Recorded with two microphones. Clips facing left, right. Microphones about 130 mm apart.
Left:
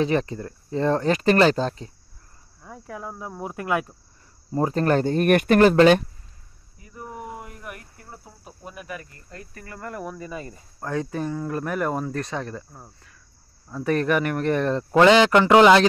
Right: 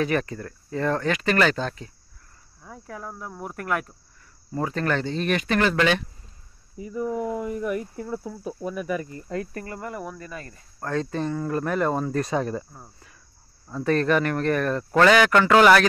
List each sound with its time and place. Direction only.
0.0 s speech: 25° left (ahead or behind)
2.6 s speech: 5° left (ahead or behind)
4.5 s speech: 35° left (ahead or behind); by 5.6 s 55° left (ahead or behind)
5.6 s speech: 40° left (ahead or behind)
9.8 s speech: 5° right (ahead or behind)
10.1 s speech: 10° left (ahead or behind)
12.2 s speech: 10° right (ahead or behind)
13.8 s speech: 15° left (ahead or behind)